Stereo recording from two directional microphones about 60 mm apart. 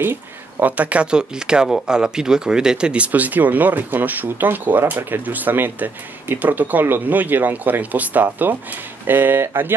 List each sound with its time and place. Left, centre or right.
0.0 s speech: right; by 3.1 s centre
3.1 s speech: right